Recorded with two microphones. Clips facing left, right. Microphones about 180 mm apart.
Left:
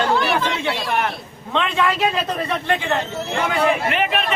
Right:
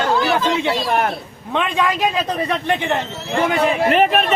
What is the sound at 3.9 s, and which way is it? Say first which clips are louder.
Speech: right 6 dB; 40° right (ahead or behind).